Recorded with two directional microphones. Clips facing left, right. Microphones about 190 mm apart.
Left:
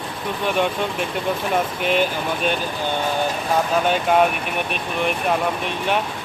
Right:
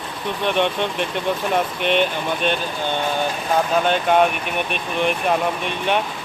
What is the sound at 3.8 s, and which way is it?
Speech, 5° left (ahead or behind).